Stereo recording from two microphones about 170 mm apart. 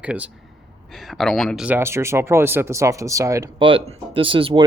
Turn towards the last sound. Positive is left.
turn(degrees=-30)  # may be behind; listen again after turning